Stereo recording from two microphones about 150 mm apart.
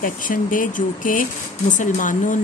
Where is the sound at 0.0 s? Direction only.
65° left (ahead or behind).